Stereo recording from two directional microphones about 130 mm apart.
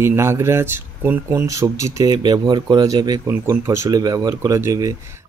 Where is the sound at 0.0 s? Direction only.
20° right (ahead or behind).